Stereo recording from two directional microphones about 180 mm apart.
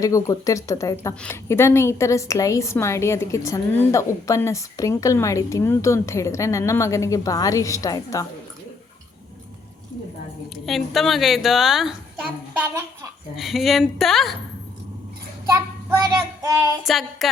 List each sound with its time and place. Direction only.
0.0 s a woman's voice: 15° left (ahead or behind)
10.7 s a woman's voice: centre (ahead or behind)
12.5 s speech: 15° right (ahead or behind)
13.3 s a woman's voice: centre (ahead or behind)
16.4 s child singing: 20° right (ahead or behind)
16.8 s a woman's voice: centre (ahead or behind)